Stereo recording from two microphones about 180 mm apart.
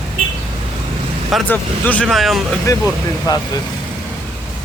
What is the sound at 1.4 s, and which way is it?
Speech, 10° left (ahead or behind).